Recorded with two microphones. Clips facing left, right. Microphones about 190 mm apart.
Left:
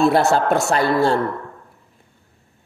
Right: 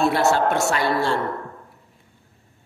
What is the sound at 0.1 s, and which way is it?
A man's voice, 40° left (ahead or behind).